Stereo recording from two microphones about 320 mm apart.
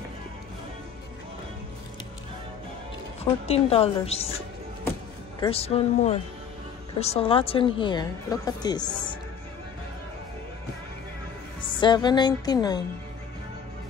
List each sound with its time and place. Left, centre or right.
3.3 s a woman's voice: centre
5.4 s a woman's voice: centre
11.6 s a woman's voice: centre